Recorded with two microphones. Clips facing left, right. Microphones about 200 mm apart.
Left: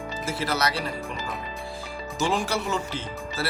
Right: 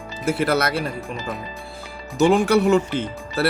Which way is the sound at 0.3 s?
60° right (ahead or behind).